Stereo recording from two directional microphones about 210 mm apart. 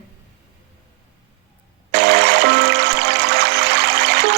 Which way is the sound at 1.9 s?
50° right (ahead or behind).